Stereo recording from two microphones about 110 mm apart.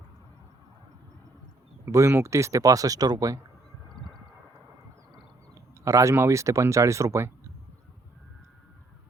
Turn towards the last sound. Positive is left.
turn(degrees=-25)  # may be behind; listen again after turning